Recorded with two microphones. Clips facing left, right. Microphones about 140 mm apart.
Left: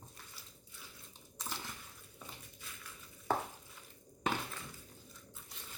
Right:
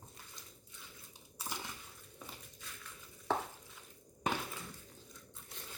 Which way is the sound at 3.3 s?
5° left (ahead or behind).